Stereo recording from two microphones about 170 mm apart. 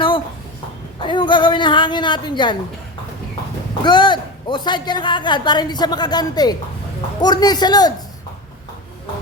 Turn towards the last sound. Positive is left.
turn(degrees=25)  # may be behind; listen again after turning